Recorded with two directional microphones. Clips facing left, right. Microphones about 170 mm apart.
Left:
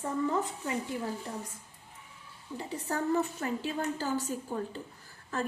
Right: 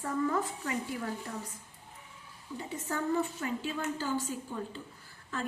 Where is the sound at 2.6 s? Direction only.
35° left (ahead or behind).